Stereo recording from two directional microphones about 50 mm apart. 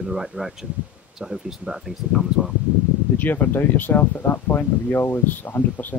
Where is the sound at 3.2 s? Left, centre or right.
Left.